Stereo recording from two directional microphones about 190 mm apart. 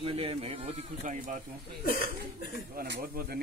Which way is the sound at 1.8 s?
50° left (ahead or behind).